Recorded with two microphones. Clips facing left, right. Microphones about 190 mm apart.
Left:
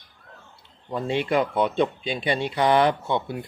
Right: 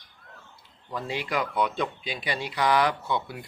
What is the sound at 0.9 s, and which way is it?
Speech, 25° left (ahead or behind).